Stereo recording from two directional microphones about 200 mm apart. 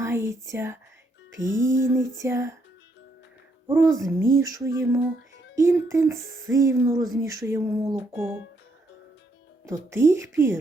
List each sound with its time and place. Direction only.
0.0 s whispering: 15° right (ahead or behind)
1.4 s speech: 15° right (ahead or behind)
3.7 s speech: 15° right (ahead or behind)
9.6 s speech: 15° right (ahead or behind)